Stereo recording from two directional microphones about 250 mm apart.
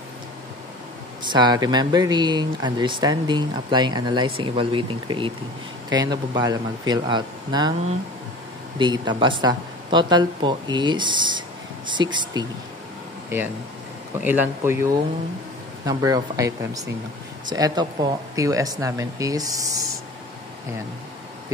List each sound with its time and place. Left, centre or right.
1.2 s speech: centre
8.7 s speech: centre